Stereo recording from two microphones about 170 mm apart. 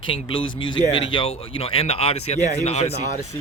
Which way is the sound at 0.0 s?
30° left (ahead or behind).